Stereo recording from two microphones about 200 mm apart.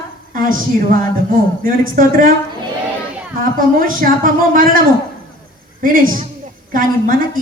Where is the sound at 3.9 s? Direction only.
45° right (ahead or behind).